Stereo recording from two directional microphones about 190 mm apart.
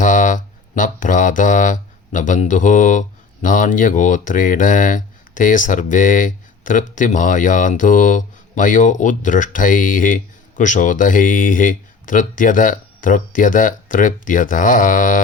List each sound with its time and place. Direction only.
0.0 s speech: 45° left (ahead or behind)